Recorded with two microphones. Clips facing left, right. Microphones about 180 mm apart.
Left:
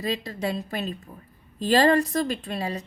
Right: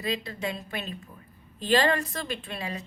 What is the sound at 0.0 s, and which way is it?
A woman's voice, 40° left (ahead or behind).